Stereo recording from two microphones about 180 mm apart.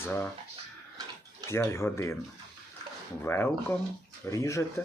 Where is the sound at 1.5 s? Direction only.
15° left (ahead or behind).